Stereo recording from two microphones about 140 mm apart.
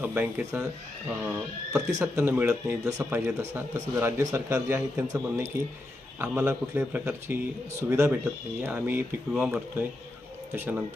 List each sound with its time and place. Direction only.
0.0 s a man's voice: 15° right (ahead or behind)